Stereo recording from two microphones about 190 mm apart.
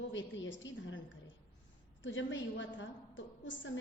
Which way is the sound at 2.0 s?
75° left (ahead or behind).